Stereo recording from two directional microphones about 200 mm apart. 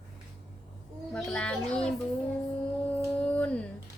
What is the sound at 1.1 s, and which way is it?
Speech, 5° left (ahead or behind).